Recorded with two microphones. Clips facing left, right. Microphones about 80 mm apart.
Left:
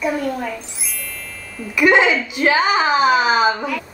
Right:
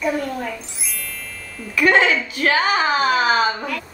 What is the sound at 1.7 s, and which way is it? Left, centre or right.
A child's voice, centre.